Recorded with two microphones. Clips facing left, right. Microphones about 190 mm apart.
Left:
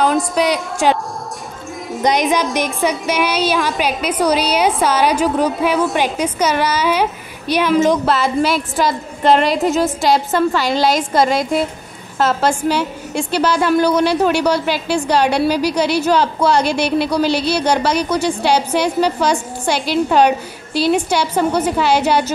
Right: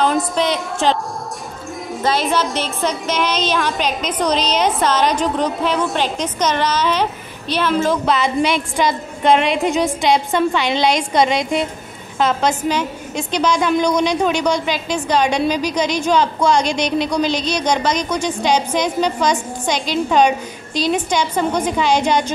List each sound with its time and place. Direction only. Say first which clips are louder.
0.0 s a woman's voice: left 2 dB; centre (ahead or behind)
2.0 s a woman's voice: left 3 dB; 15° left (ahead or behind)